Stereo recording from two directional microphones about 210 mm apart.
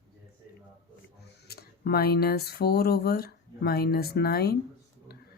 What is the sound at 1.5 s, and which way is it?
Speech, 50° left (ahead or behind).